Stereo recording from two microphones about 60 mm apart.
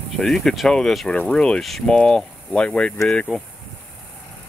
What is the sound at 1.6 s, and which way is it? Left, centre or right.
Speech, centre.